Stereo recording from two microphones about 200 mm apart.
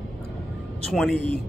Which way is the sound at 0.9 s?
Centre (ahead or behind).